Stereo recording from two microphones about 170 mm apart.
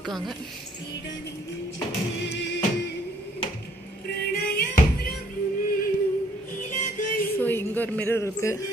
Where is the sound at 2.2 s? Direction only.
90° left.